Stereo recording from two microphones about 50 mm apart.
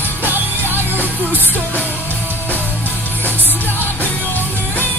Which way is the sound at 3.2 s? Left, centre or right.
Right.